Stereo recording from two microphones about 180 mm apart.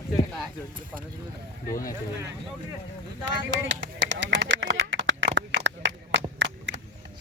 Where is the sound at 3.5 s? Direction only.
90° right.